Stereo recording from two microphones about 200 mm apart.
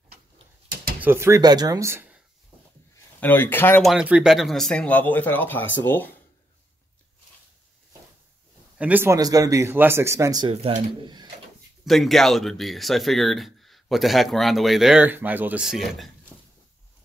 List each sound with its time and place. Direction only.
1.0 s speech: 10° right (ahead or behind)
3.2 s speech: 10° left (ahead or behind)
3.9 s speech: 5° right (ahead or behind)
8.7 s speech: 10° right (ahead or behind)
10.5 s speech: 30° right (ahead or behind)
11.8 s speech: centre (ahead or behind)